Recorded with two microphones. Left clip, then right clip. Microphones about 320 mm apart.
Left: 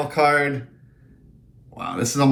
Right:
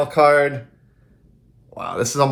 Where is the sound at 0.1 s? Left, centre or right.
Right.